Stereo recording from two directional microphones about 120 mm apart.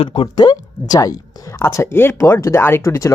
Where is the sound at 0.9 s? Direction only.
30° left (ahead or behind).